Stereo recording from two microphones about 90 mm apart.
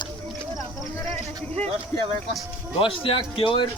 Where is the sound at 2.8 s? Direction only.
85° left.